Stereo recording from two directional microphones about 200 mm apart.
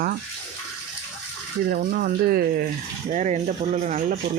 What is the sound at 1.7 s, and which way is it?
Speech, 45° right (ahead or behind).